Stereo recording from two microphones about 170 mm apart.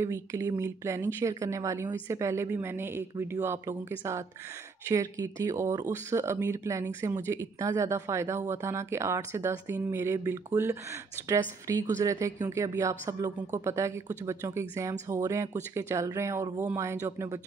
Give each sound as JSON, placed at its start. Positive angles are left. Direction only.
{"t": 0.0, "sound": "speech", "side_deg": -15}
{"t": 4.8, "sound": "a woman's voice", "side_deg": -20}